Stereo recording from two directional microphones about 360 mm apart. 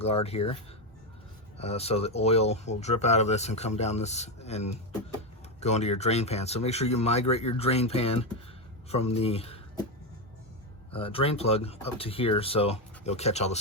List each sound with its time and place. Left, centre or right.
0.0 s speech: centre
1.5 s speech: centre
10.9 s speech: centre